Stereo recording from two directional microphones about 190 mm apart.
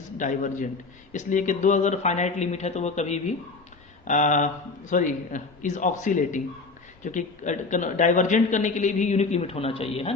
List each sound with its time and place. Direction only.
0.2 s a man's voice: 40° left (ahead or behind)